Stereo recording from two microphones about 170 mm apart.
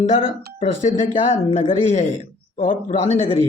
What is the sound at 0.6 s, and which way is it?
Speech, 40° left (ahead or behind).